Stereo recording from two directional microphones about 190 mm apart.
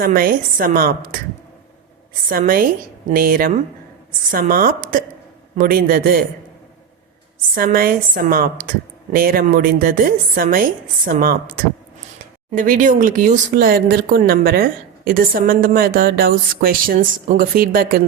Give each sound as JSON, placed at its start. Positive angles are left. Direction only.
{"t": 0.0, "sound": "speech", "side_deg": -50}
{"t": 2.3, "sound": "speech", "side_deg": -50}
{"t": 7.5, "sound": "speech", "side_deg": -50}